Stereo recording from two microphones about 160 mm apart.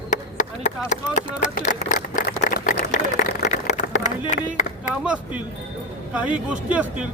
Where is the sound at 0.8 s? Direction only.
50° left (ahead or behind).